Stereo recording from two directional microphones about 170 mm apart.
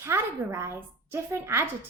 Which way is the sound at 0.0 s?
15° right (ahead or behind).